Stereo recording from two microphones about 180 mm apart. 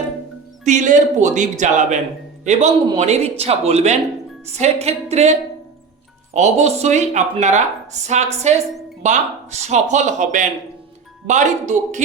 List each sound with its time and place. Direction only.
0.6 s speech: 45° right (ahead or behind)